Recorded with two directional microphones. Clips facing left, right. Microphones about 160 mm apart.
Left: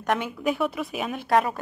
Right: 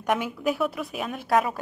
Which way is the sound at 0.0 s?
5° right (ahead or behind).